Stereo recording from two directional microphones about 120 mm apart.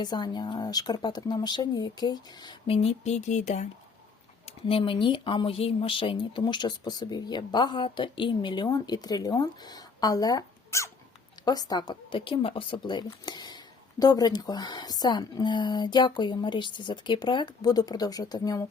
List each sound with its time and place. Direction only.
0.0 s speech: 35° left (ahead or behind); by 3.7 s 75° left (ahead or behind)
4.4 s speech: 50° left (ahead or behind); by 18.7 s 30° left (ahead or behind)